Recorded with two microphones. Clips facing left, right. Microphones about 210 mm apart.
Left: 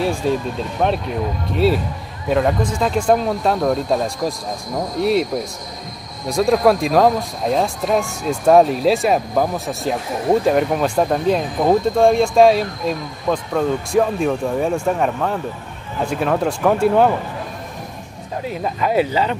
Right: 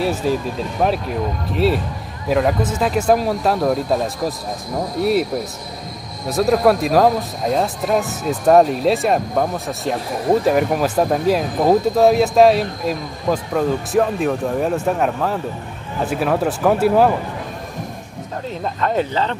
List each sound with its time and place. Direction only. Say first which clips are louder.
0.0 s speech: even; 5° right (ahead or behind)
6.2 s speech: even; 5° right (ahead or behind)
18.5 s speech: left 1 dB; 10° left (ahead or behind)